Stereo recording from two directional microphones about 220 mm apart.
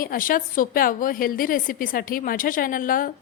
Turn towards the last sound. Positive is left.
turn(degrees=40)  # may be behind; listen again after turning